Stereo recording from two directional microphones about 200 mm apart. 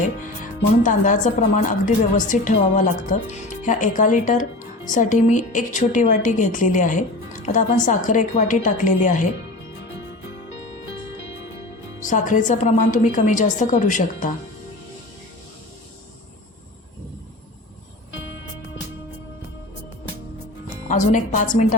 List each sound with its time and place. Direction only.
0.8 s a woman's voice: 40° left (ahead or behind)
12.0 s a woman's voice: 40° left (ahead or behind)
20.8 s a woman's voice: 40° left (ahead or behind)